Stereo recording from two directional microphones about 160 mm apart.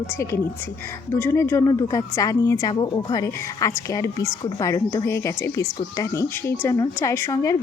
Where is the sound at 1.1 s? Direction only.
15° left (ahead or behind).